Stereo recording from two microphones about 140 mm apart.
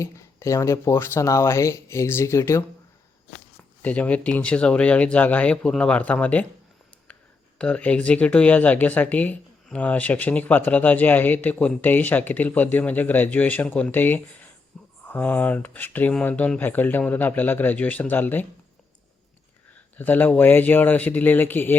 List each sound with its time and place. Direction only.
0.0 s speech: 20° left (ahead or behind)
3.6 s speech: 10° left (ahead or behind)
7.6 s speech: 10° left (ahead or behind)
20.0 s speech: 15° left (ahead or behind)